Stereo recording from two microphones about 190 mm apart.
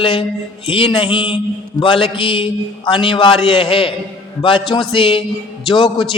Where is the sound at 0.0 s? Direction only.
25° left (ahead or behind).